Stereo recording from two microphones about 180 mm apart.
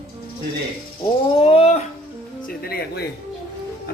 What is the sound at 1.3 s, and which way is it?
Speech, 30° left (ahead or behind).